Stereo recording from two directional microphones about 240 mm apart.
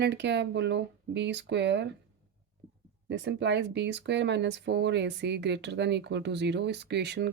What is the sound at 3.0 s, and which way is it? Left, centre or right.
Speech, right.